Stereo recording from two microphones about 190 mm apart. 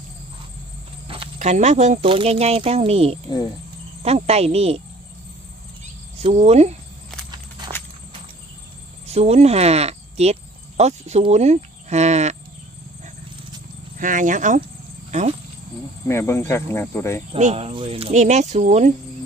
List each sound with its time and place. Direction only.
1.0 s speech: 30° right (ahead or behind)
6.1 s speech: 30° right (ahead or behind)
9.0 s speech: 35° right (ahead or behind)
14.0 s speech: 45° right (ahead or behind)
16.0 s speech: 15° left (ahead or behind)
17.3 s speech: 35° right (ahead or behind)